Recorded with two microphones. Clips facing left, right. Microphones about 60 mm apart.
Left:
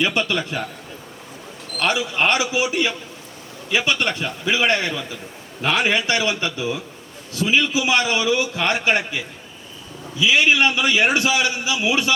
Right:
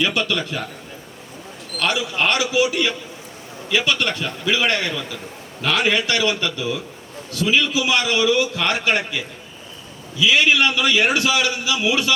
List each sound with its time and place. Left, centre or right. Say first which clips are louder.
0.0 s a man's voice: even; left
1.8 s a man's voice: left 1 dB; left